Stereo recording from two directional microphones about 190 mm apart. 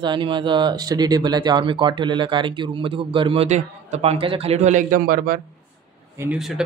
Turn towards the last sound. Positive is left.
turn(degrees=-5)  # may be behind; listen again after turning